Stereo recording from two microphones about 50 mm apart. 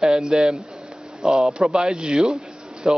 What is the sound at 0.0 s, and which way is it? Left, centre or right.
Speech, centre.